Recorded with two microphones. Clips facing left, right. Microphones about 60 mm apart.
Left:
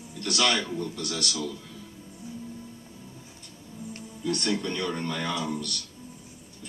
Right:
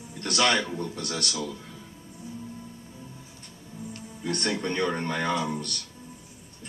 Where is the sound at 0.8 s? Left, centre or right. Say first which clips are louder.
Even; right.